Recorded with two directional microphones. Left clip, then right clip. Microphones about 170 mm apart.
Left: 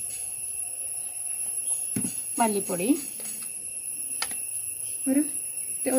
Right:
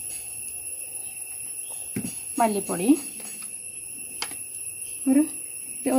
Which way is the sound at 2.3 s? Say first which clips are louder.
Right 2 dB; 30° right (ahead or behind).